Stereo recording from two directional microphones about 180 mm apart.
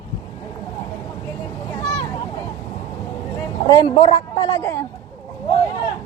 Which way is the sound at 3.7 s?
25° left (ahead or behind).